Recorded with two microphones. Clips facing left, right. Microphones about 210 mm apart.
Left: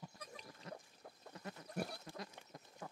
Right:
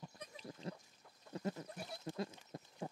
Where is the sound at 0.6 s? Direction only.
30° right (ahead or behind).